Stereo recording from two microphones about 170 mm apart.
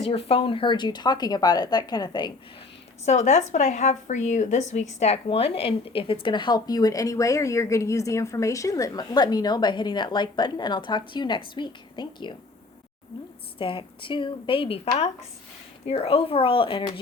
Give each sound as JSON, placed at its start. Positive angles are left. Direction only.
{"t": 0.0, "sound": "a woman's voice", "side_deg": 35}
{"t": 3.1, "sound": "a woman's voice", "side_deg": 40}
{"t": 13.6, "sound": "a woman's voice", "side_deg": 30}